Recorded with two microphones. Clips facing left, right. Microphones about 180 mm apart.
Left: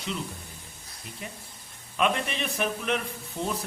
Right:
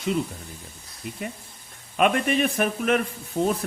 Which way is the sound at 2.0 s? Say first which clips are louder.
Right 6 dB; 55° right (ahead or behind).